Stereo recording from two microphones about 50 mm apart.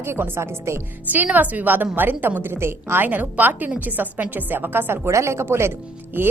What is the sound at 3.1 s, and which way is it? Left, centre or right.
A woman's voice, right.